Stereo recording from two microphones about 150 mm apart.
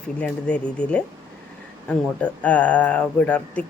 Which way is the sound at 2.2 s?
10° left (ahead or behind).